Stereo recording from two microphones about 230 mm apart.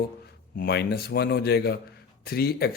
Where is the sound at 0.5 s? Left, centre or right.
Left.